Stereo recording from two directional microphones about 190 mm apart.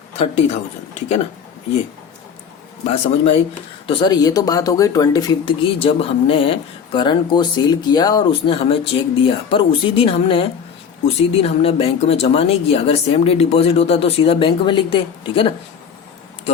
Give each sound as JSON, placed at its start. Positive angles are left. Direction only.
{"t": 2.8, "sound": "speech", "side_deg": 35}
{"t": 3.8, "sound": "speech", "side_deg": 20}